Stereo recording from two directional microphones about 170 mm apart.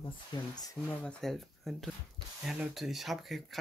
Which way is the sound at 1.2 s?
Centre (ahead or behind).